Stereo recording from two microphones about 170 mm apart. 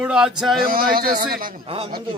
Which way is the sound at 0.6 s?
60° right (ahead or behind).